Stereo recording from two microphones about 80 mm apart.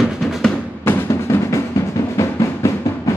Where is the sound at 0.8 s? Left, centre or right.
Left.